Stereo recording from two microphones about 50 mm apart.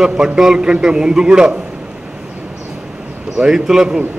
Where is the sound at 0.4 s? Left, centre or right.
Centre.